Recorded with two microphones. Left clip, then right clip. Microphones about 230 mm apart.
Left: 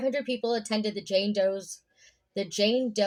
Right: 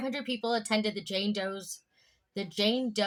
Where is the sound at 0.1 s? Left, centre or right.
Centre.